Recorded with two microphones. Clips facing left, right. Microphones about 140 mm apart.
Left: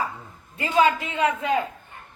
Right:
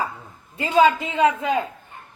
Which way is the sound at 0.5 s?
30° right (ahead or behind).